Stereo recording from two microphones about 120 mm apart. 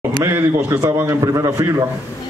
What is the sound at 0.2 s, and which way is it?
A man's voice, 20° right (ahead or behind).